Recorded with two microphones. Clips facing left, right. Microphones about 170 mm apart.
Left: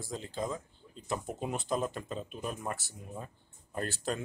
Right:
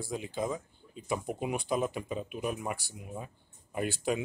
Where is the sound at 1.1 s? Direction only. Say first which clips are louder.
Right 3 dB; 5° right (ahead or behind).